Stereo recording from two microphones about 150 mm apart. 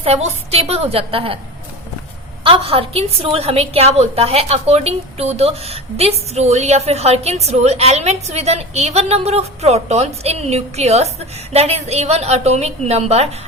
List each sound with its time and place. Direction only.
0.0 s a woman's voice: 45° right (ahead or behind)
2.4 s a woman's voice: 35° right (ahead or behind)